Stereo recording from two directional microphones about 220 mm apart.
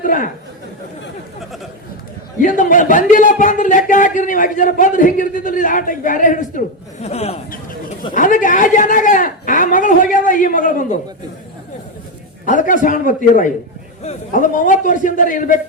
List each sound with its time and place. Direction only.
0.0 s speech: 40° left (ahead or behind)
2.4 s speech: 35° left (ahead or behind)
12.5 s speech: 35° left (ahead or behind)